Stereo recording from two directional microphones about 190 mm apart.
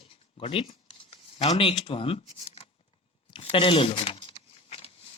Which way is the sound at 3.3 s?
30° left (ahead or behind).